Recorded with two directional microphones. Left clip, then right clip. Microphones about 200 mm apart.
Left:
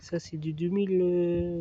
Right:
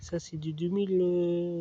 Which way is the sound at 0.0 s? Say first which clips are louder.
Left 2 dB; 10° left (ahead or behind).